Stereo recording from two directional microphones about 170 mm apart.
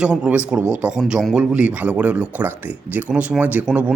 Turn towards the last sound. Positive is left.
turn(degrees=-5)  # may be behind; listen again after turning